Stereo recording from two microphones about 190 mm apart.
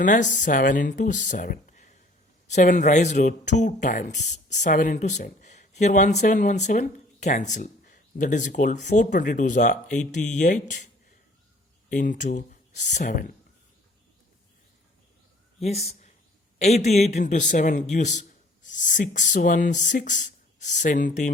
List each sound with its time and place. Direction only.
0.0 s speech: 40° left (ahead or behind)
11.9 s speech: 40° left (ahead or behind)
15.6 s speech: 35° left (ahead or behind)